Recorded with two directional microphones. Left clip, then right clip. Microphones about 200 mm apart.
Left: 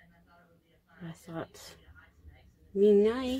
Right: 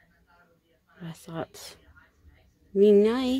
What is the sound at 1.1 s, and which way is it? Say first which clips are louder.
Speech: right 5 dB; 40° right (ahead or behind).